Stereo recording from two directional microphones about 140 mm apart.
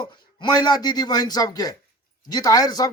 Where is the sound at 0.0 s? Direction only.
30° left (ahead or behind).